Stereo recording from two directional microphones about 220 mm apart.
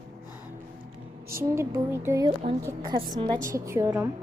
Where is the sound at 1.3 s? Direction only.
10° right (ahead or behind).